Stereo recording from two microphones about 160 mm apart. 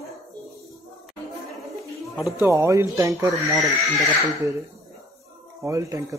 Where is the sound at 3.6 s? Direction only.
Centre (ahead or behind).